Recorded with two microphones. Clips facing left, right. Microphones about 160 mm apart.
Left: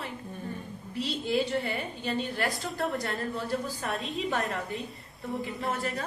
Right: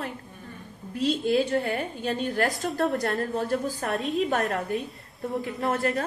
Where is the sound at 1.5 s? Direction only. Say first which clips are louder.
Right 4 dB; 50° right (ahead or behind).